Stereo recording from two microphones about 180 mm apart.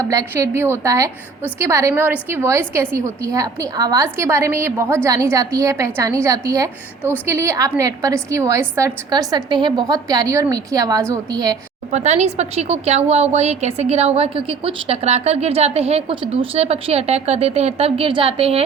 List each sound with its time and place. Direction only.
0.1 s a woman's voice: 20° right (ahead or behind)
11.9 s a woman's voice: 40° right (ahead or behind)